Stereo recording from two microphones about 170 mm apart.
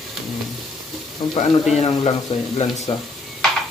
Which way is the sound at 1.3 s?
35° left (ahead or behind).